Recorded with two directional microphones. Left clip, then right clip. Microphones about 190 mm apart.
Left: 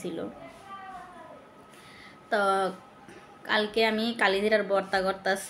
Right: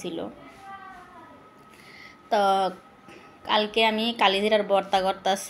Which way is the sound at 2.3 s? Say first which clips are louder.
Right 4 dB; 10° right (ahead or behind).